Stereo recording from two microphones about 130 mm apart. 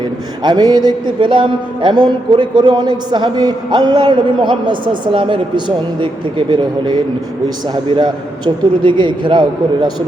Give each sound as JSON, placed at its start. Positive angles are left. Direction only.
{"t": 0.4, "sound": "music", "side_deg": -35}